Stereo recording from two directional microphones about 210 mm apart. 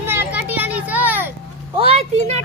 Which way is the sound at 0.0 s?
10° right (ahead or behind).